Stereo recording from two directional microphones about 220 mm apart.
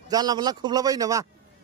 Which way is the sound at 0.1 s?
20° right (ahead or behind).